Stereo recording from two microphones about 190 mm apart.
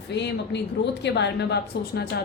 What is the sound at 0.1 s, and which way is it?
Speech, 65° left (ahead or behind).